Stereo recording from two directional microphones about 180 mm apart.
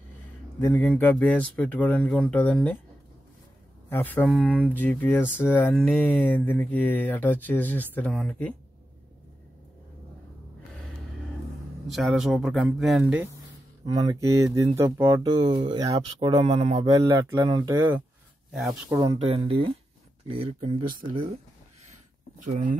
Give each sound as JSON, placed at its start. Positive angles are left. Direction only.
{"t": 0.6, "sound": "speech", "side_deg": 10}
{"t": 3.9, "sound": "speech", "side_deg": 10}
{"t": 11.9, "sound": "speech", "side_deg": 0}
{"t": 18.5, "sound": "speech", "side_deg": 0}
{"t": 19.0, "sound": "speech", "side_deg": -35}
{"t": 22.4, "sound": "speech", "side_deg": -45}